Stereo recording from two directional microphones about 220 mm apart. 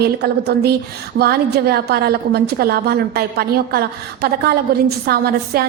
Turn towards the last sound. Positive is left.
turn(degrees=-45)  # may be behind; listen again after turning